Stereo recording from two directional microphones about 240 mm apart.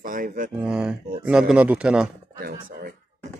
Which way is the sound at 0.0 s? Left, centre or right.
Right.